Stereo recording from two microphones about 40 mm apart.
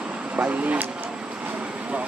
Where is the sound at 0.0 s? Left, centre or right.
Right.